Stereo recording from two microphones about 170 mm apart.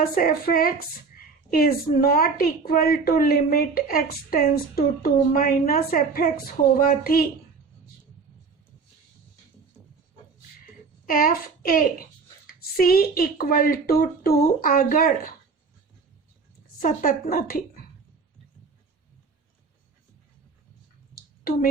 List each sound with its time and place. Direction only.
0.1 s a woman's voice: 60° left (ahead or behind)
11.0 s a child's voice: 55° left (ahead or behind)
16.8 s a woman's voice: 55° left (ahead or behind)
21.2 s a sound: 60° left (ahead or behind)